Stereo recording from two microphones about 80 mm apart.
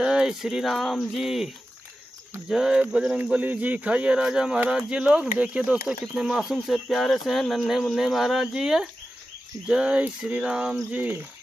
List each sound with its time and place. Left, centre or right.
0.0 s a sound: centre
1.1 s speech: centre
2.5 s speech: centre
10.9 s cricket: right